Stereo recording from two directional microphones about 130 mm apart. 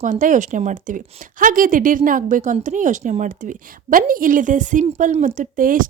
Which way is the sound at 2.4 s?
65° right (ahead or behind).